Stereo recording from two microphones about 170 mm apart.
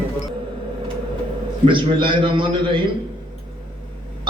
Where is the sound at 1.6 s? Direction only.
30° right (ahead or behind).